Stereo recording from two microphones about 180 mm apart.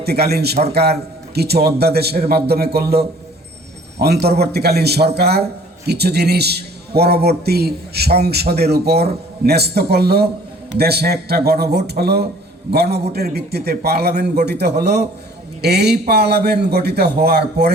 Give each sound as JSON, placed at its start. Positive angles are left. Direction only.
{"t": 0.0, "sound": "a man's voice", "side_deg": -60}